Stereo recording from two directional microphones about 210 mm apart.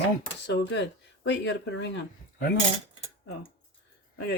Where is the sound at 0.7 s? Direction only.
55° left (ahead or behind).